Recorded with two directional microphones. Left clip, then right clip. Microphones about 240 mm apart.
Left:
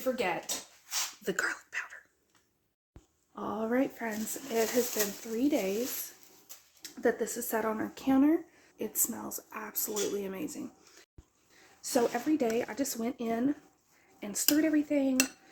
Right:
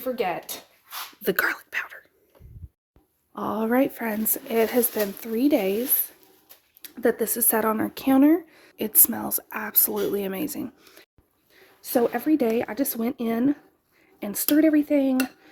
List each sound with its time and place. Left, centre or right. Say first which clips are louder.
0.0 s speech: right 5 dB; right
3.3 s speech: right 8 dB; right
6.8 s speech: right 7 dB; right